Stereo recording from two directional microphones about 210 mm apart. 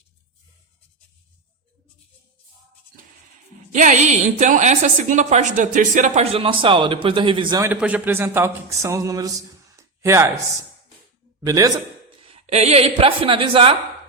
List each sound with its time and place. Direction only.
3.7 s a woman's voice: 35° right (ahead or behind)
7.7 s speech: 5° right (ahead or behind)
11.3 s speech: 15° right (ahead or behind)
12.2 s a woman's voice: 30° right (ahead or behind)